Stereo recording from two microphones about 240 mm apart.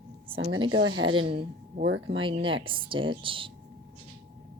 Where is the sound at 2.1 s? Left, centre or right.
Right.